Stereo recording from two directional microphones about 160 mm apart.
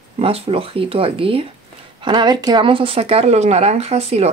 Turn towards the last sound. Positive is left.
turn(degrees=-40)  # may be behind; listen again after turning